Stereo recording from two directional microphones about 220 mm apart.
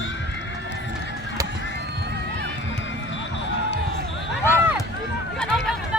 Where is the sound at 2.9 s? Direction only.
60° left (ahead or behind).